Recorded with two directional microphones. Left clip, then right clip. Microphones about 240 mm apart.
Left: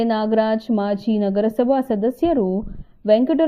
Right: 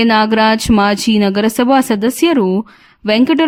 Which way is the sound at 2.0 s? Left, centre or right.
Right.